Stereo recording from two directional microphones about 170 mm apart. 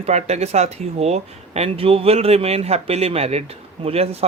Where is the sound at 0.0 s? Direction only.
40° right (ahead or behind).